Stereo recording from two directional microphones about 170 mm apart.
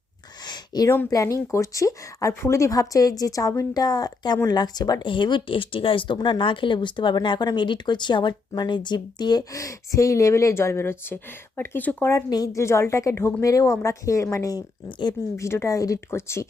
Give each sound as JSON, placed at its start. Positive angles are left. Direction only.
{"t": 0.4, "sound": "a sound", "side_deg": 25}
{"t": 0.9, "sound": "speech", "side_deg": 20}
{"t": 15.4, "sound": "speech", "side_deg": 15}